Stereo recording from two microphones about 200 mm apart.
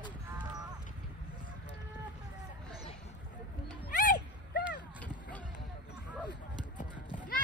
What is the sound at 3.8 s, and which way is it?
Music, 50° left (ahead or behind).